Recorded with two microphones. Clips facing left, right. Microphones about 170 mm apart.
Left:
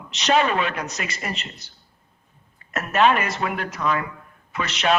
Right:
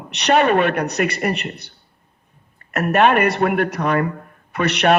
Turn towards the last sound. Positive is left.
turn(degrees=-65)  # may be behind; listen again after turning